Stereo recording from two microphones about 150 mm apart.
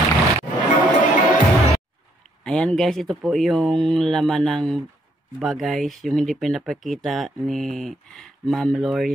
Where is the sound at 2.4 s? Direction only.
5° left (ahead or behind).